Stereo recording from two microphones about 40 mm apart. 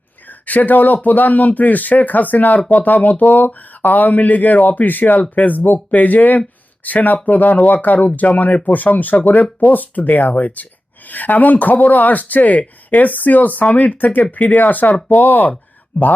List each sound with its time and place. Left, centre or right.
0.3 s speech: left